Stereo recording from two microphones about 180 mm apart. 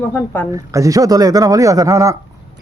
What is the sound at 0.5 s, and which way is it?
Speech, 20° right (ahead or behind).